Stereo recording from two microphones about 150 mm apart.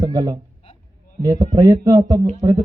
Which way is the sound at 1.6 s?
25° right (ahead or behind).